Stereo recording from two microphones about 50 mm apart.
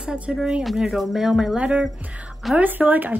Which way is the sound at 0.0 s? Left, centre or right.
Centre.